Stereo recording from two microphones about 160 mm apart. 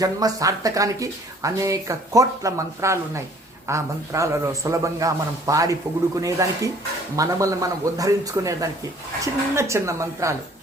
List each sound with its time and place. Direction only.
0.0 s speech: 20° right (ahead or behind)